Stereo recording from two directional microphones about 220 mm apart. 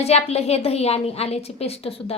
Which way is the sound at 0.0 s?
30° left (ahead or behind).